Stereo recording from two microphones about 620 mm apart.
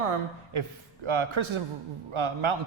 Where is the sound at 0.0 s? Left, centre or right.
Right.